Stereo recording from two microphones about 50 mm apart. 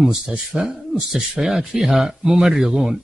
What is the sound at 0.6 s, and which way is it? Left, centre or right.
Speech, centre.